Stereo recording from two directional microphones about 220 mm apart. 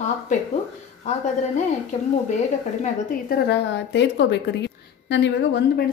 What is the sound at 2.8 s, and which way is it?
A woman's voice, 45° left (ahead or behind).